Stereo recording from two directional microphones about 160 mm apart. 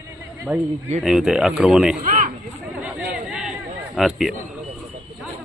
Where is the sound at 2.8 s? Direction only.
5° right (ahead or behind).